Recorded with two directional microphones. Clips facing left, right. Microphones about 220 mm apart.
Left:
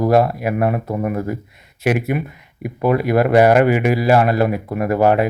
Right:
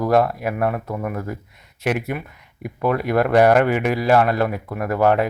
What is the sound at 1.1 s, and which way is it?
Speech, 10° left (ahead or behind).